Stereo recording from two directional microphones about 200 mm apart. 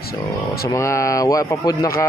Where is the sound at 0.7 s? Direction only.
15° left (ahead or behind).